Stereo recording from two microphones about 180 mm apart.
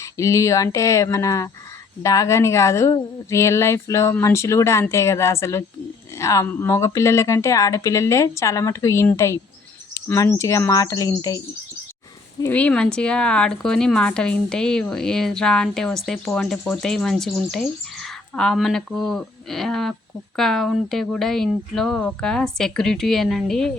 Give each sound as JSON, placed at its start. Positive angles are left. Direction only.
{"t": 0.0, "sound": "speech", "side_deg": 15}